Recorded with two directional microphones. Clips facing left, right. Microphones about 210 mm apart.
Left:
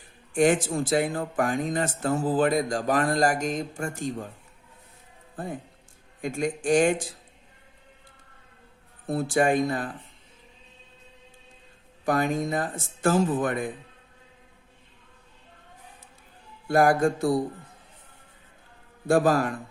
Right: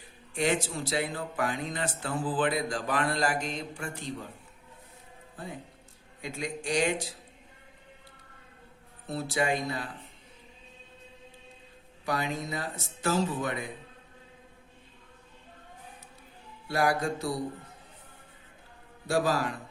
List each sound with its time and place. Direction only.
0.3 s speech: 50° left (ahead or behind)
5.4 s speech: 50° left (ahead or behind)
9.0 s speech: 50° left (ahead or behind)
12.0 s speech: 50° left (ahead or behind)
16.6 s speech: 50° left (ahead or behind)
19.0 s speech: 50° left (ahead or behind)